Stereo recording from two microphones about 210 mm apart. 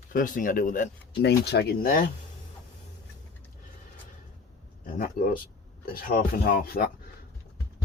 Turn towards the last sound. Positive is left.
turn(degrees=45)  # may be behind; listen again after turning